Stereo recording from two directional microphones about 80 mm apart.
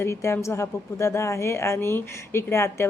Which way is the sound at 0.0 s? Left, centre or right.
Left.